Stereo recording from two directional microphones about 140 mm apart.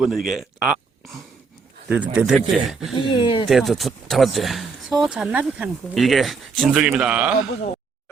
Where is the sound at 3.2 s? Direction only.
40° left (ahead or behind).